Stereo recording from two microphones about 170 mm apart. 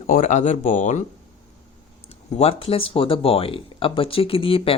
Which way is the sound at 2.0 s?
35° left (ahead or behind).